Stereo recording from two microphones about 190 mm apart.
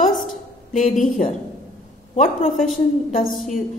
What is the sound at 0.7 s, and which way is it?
A woman's voice, 45° left (ahead or behind).